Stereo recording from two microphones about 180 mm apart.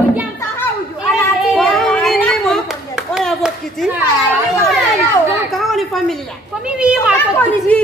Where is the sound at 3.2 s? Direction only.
Centre (ahead or behind).